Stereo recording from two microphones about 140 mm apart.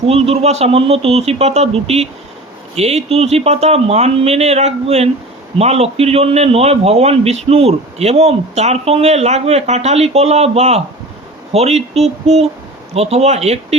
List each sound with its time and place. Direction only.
0.1 s a man's voice: 45° right (ahead or behind)